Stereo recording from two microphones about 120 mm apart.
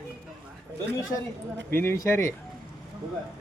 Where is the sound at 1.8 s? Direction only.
20° left (ahead or behind).